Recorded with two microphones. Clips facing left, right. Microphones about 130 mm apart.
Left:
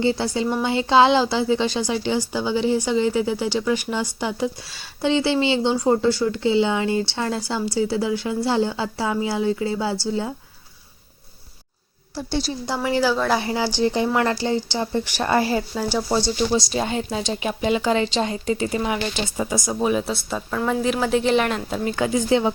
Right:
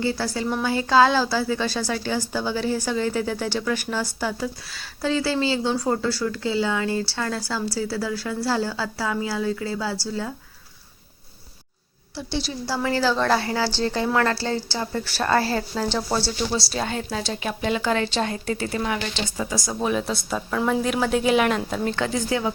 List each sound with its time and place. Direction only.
0.0 s a woman's voice: 20° left (ahead or behind)
12.1 s a woman's voice: 40° left (ahead or behind)
12.6 s a woman's voice: 20° left (ahead or behind)
19.8 s a woman's voice: 5° left (ahead or behind)
22.1 s a woman's voice: 25° left (ahead or behind)